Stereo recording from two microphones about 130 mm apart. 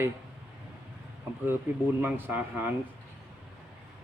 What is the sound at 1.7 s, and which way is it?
Speech, 15° right (ahead or behind).